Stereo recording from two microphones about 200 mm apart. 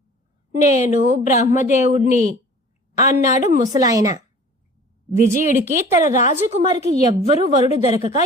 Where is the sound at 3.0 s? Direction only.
15° right (ahead or behind).